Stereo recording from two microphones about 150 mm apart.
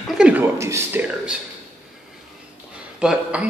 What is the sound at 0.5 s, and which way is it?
Speech, 20° right (ahead or behind).